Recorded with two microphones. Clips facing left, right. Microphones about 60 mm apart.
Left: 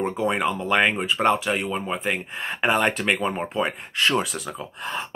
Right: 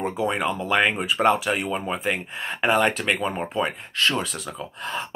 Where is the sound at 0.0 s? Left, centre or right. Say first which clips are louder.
Left 1 dB; centre.